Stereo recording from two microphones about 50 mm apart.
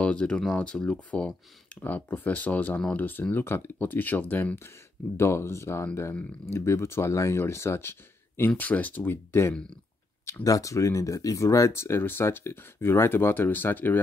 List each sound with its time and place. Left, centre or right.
0.0 s speech: left
1.8 s speech: left
5.1 s speech: left
8.5 s speech: left
9.1 s speech: left
10.2 s speech: left